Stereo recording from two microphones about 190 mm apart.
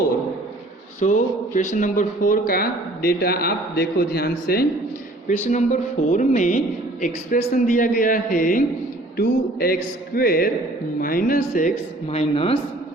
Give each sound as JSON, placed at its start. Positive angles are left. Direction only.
{"t": 0.9, "sound": "speech", "side_deg": 40}
{"t": 5.5, "sound": "speech", "side_deg": 40}
{"t": 12.1, "sound": "a woman's voice", "side_deg": 30}